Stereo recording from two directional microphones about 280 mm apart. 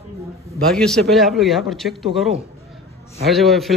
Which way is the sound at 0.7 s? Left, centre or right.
Centre.